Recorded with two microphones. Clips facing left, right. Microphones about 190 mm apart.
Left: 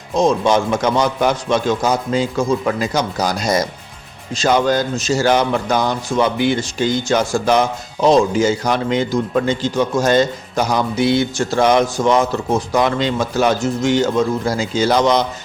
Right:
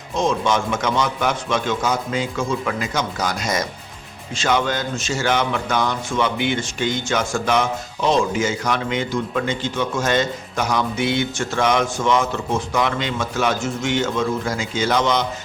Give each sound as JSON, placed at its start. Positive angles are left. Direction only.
{"t": 0.1, "sound": "a man's voice", "side_deg": 35}